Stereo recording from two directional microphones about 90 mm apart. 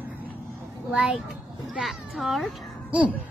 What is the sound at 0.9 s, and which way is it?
A child's voice, 5° right (ahead or behind).